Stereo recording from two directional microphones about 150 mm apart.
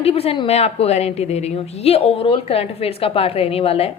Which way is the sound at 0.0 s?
40° left (ahead or behind).